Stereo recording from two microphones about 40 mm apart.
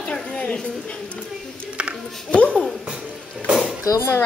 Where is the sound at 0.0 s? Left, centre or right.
Left.